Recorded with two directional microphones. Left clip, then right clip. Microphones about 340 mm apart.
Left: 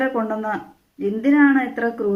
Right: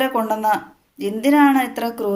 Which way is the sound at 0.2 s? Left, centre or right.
Centre.